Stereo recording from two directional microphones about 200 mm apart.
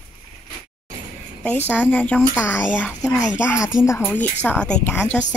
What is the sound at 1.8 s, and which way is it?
A woman's voice, 10° left (ahead or behind).